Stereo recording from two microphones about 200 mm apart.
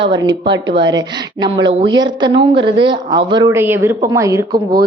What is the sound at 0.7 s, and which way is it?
A woman's voice, 20° right (ahead or behind).